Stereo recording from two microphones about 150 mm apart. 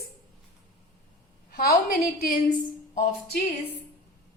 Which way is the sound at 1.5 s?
80° left.